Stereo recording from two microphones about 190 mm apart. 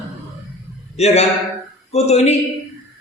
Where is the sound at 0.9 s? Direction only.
35° left (ahead or behind).